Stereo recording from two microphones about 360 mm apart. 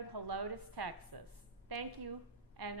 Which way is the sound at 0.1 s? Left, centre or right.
Right.